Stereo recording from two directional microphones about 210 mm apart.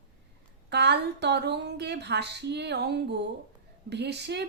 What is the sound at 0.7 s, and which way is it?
A woman's voice, 55° right (ahead or behind).